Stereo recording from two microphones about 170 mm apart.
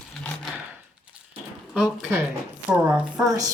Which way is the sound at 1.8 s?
5° right (ahead or behind).